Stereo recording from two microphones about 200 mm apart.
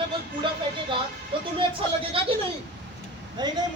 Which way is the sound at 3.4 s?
20° right (ahead or behind).